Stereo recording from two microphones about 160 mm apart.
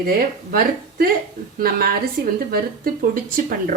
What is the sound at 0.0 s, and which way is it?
A woman's voice, 70° right (ahead or behind).